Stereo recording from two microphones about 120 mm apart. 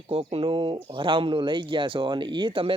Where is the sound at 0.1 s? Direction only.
55° right (ahead or behind).